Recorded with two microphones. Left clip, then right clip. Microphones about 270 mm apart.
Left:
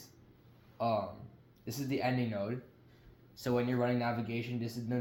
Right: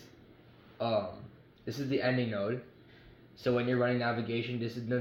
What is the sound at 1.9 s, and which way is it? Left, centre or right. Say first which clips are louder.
Speech: right 3 dB; left.